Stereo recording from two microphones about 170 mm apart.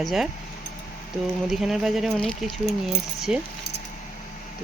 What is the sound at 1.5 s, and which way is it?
Speech, centre (ahead or behind).